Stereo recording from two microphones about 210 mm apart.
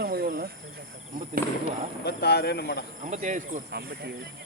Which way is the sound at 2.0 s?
50° left (ahead or behind).